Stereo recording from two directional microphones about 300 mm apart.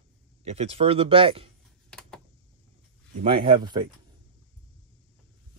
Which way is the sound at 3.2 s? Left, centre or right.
Centre.